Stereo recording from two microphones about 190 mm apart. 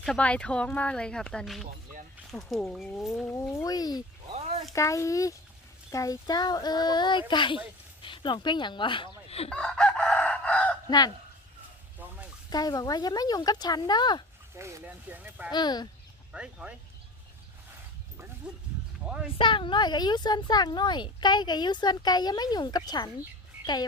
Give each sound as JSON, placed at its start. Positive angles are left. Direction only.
{"t": 0.0, "sound": "speech", "side_deg": 5}
{"t": 3.6, "sound": "speech", "side_deg": 20}
{"t": 4.3, "sound": "a sound", "side_deg": -35}
{"t": 4.7, "sound": "speech", "side_deg": 15}
{"t": 9.5, "sound": "chicken", "side_deg": 5}
{"t": 10.8, "sound": "speech", "side_deg": 20}
{"t": 11.9, "sound": "a sound", "side_deg": -10}
{"t": 12.5, "sound": "speech", "side_deg": 20}
{"t": 14.5, "sound": "speech", "side_deg": -15}
{"t": 15.5, "sound": "speech", "side_deg": 20}
{"t": 16.3, "sound": "speech", "side_deg": -5}
{"t": 18.5, "sound": "wild animals", "side_deg": -5}
{"t": 19.1, "sound": "a sound", "side_deg": -5}
{"t": 19.4, "sound": "speech", "side_deg": 25}